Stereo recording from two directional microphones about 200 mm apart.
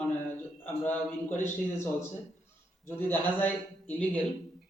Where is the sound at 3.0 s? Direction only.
10° left (ahead or behind).